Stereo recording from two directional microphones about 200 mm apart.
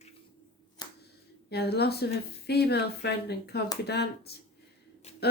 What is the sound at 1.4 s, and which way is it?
A woman's voice, 55° left (ahead or behind).